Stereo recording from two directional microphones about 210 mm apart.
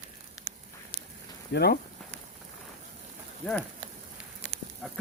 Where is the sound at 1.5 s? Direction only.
50° left (ahead or behind).